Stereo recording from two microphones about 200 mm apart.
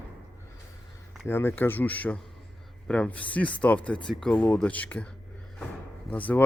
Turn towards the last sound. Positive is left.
turn(degrees=10)  # may be behind; listen again after turning